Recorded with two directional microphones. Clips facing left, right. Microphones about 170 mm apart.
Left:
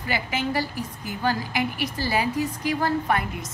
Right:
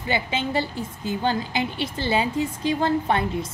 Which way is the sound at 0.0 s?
25° right (ahead or behind).